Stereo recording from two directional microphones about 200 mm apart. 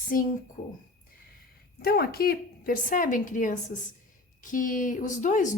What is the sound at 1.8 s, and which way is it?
A woman's voice, 50° left (ahead or behind).